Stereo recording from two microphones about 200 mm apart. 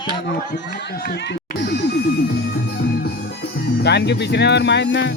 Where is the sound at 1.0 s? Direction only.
60° left (ahead or behind).